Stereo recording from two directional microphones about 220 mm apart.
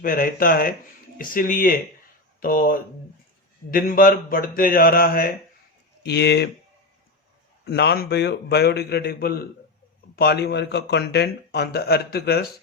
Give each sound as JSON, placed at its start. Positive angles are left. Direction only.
{"t": 0.0, "sound": "speech", "side_deg": 40}
{"t": 7.6, "sound": "speech", "side_deg": 45}